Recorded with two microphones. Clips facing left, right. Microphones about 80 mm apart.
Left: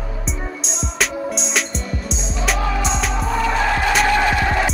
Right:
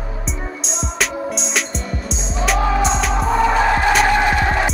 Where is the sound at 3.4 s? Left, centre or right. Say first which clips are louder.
Right 3 dB; centre.